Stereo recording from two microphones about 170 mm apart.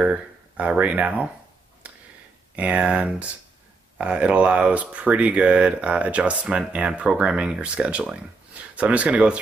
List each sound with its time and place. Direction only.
0.0 s speech: 5° right (ahead or behind)
1.8 s tick: 10° right (ahead or behind)
2.5 s speech: 10° right (ahead or behind)